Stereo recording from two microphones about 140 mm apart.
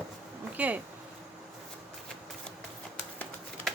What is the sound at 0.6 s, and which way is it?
Speech, 10° right (ahead or behind).